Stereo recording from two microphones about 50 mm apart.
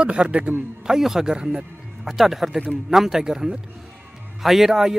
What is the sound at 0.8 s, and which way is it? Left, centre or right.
Speech, centre.